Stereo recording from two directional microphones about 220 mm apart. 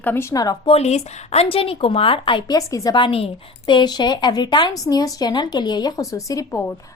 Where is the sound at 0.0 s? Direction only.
10° left (ahead or behind).